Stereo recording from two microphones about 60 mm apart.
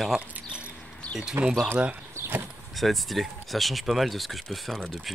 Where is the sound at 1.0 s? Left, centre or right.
Centre.